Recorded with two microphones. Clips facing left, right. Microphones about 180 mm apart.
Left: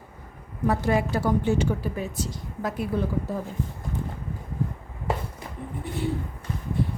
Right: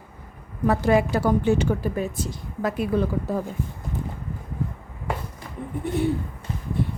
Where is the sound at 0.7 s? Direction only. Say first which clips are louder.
Right 4 dB; 80° right; by 2.3 s 50° right (ahead or behind).